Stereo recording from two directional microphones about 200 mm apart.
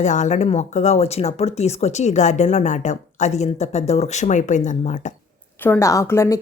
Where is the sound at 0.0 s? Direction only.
35° left (ahead or behind).